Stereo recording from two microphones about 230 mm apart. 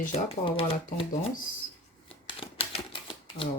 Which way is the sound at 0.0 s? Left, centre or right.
Left.